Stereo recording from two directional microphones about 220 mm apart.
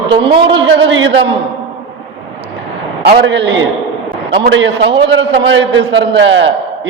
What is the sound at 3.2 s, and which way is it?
A man's voice, 50° right (ahead or behind).